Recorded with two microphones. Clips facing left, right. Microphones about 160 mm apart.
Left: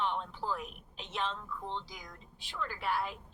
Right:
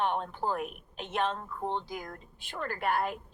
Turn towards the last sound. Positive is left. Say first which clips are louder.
# right 5 dB
turn(degrees=-55)  # may be behind; listen again after turning